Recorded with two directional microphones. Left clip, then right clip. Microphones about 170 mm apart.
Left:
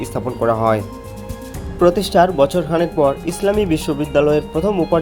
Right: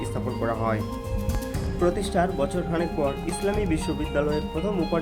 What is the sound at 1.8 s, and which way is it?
Speech, 25° left (ahead or behind).